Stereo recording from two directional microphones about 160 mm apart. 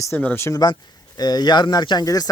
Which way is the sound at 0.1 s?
15° left (ahead or behind).